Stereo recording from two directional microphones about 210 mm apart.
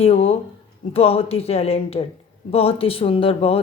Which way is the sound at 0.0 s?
30° left (ahead or behind).